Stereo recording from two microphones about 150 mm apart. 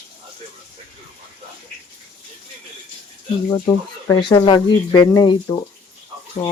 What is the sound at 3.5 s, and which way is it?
Speech, 20° left (ahead or behind).